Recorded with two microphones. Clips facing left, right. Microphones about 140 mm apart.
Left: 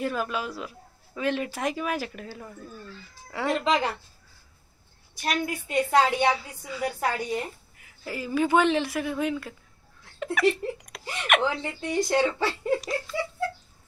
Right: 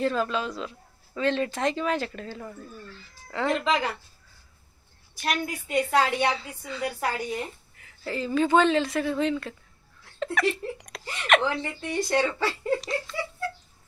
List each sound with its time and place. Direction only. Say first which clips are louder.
0.0 s a woman's voice: right 3 dB; 10° left (ahead or behind)
5.7 s a woman's voice: left 1 dB; 5° left (ahead or behind)
11.6 s a woman's voice: left 2 dB; 20° left (ahead or behind)
13.1 s speech: left 3 dB; 5° left (ahead or behind)